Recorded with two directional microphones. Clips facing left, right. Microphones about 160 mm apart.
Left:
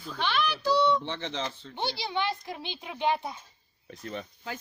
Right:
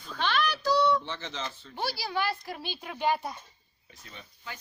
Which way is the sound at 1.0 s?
60° left (ahead or behind).